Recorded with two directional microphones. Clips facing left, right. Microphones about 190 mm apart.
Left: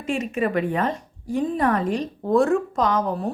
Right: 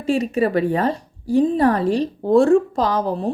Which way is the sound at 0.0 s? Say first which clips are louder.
Right 5 dB; 35° right (ahead or behind).